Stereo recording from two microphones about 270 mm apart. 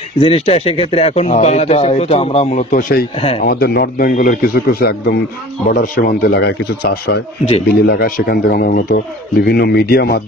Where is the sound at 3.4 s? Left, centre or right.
Left.